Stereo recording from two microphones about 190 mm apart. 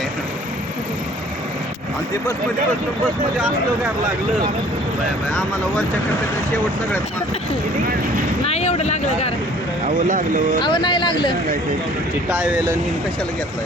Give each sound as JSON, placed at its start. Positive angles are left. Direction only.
{"t": 8.4, "sound": "speech", "side_deg": 35}
{"t": 9.8, "sound": "speech", "side_deg": -45}
{"t": 10.6, "sound": "speech", "side_deg": 25}